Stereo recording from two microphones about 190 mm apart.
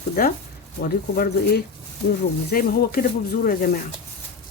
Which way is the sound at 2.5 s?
50° left (ahead or behind).